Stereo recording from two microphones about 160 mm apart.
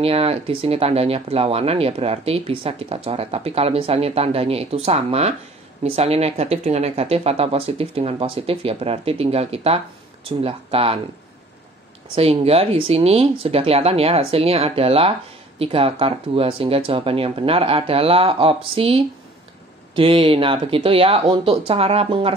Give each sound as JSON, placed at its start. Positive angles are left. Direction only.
{"t": 0.0, "sound": "speech", "side_deg": -35}
{"t": 12.2, "sound": "speech", "side_deg": -40}